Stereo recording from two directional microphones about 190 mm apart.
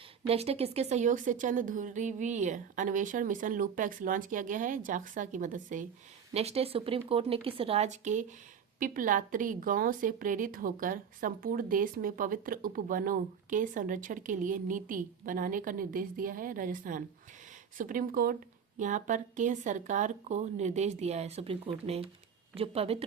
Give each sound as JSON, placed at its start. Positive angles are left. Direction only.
{"t": 0.3, "sound": "a woman's voice", "side_deg": -30}